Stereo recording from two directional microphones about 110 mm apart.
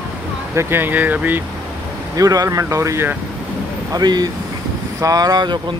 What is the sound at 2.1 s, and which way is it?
Speech, 30° right (ahead or behind).